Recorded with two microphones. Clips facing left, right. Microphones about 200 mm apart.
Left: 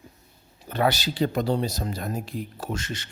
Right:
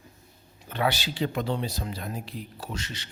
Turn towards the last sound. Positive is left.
turn(degrees=50)  # may be behind; listen again after turning